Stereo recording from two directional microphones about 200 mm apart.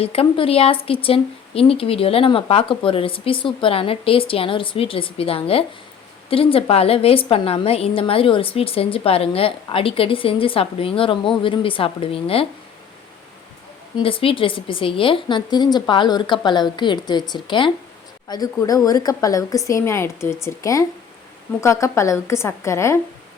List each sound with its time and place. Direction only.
0.0 s a woman's voice: 30° left (ahead or behind)
14.0 s a woman's voice: 25° left (ahead or behind)